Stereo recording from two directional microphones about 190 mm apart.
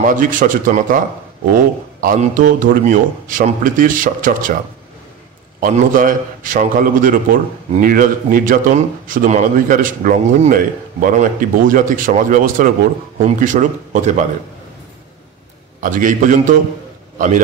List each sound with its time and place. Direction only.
0.0 s a man's voice: 45° right (ahead or behind)
5.6 s a man's voice: 45° right (ahead or behind)
15.8 s a man's voice: 45° right (ahead or behind)